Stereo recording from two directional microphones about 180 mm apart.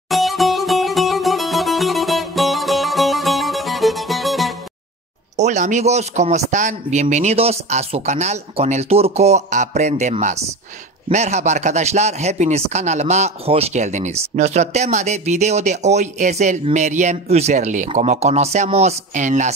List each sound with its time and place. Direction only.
0.1 s music: centre (ahead or behind)
5.4 s speech: 40° right (ahead or behind)